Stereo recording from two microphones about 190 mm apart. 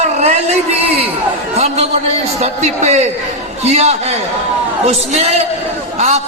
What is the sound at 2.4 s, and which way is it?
A man's voice, 35° right (ahead or behind).